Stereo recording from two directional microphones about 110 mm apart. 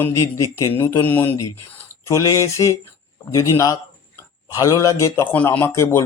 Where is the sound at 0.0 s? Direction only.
25° left (ahead or behind).